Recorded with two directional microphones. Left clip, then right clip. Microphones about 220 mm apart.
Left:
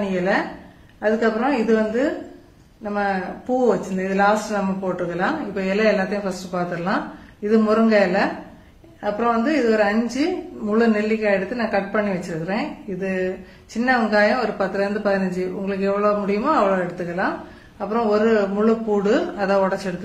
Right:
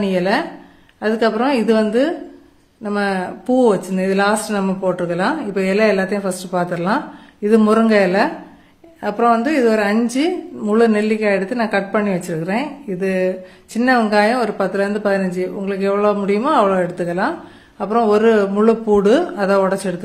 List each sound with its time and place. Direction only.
0.1 s a woman's voice: 55° right (ahead or behind)